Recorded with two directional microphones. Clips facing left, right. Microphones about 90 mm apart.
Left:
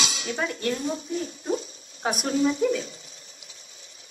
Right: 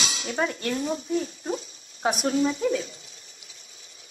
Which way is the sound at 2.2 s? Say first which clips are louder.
Left 2 dB; 35° right (ahead or behind).